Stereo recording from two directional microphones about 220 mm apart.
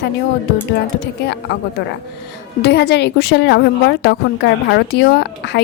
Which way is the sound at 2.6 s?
50° left (ahead or behind).